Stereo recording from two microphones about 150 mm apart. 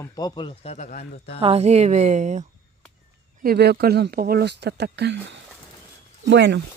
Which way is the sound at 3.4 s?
90° right.